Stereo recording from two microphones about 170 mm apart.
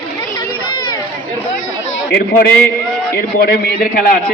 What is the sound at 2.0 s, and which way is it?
Speech, 80° left.